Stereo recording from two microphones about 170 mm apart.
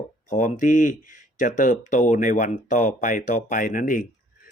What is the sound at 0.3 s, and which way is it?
Speech, 45° left (ahead or behind).